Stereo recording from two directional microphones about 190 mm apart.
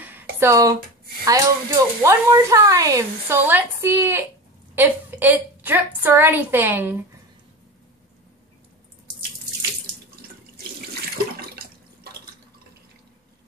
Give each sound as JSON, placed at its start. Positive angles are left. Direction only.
{"t": 0.0, "sound": "music", "side_deg": -10}
{"t": 1.2, "sound": "a woman's voice", "side_deg": -15}
{"t": 11.3, "sound": "water", "side_deg": -55}